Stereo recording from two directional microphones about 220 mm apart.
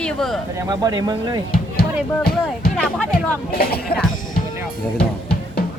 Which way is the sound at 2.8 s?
5° left (ahead or behind).